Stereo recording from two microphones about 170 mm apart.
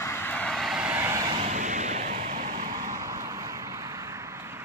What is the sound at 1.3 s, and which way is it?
Vehicle, 45° right (ahead or behind).